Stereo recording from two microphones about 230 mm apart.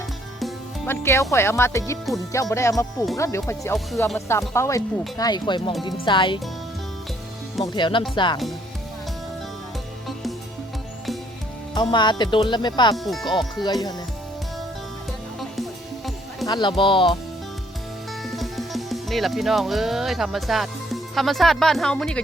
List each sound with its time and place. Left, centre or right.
0.3 s music: centre
1.0 s speech: centre
7.6 s speech: centre
11.7 s speech: centre
16.5 s speech: centre
18.3 s speech: centre